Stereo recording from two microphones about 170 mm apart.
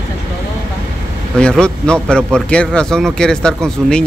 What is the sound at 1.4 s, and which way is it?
A man's voice, 5° left (ahead or behind).